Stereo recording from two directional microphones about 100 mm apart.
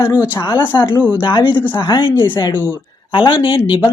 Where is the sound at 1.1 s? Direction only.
50° left (ahead or behind).